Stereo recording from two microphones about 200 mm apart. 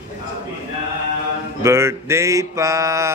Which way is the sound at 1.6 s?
15° right (ahead or behind).